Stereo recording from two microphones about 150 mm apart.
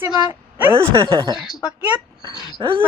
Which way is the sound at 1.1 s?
30° right (ahead or behind).